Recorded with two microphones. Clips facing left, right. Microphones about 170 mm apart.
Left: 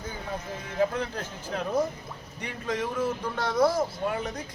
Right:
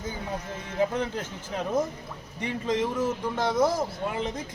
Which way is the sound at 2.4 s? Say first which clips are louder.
Right 4 dB; 20° right (ahead or behind).